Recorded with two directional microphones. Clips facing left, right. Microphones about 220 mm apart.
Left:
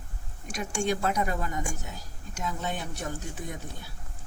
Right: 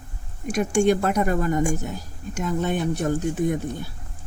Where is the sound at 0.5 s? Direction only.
55° right (ahead or behind).